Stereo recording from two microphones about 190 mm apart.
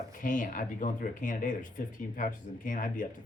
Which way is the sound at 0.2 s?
45° left (ahead or behind).